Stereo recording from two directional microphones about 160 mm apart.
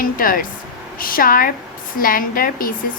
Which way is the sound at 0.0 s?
65° left (ahead or behind).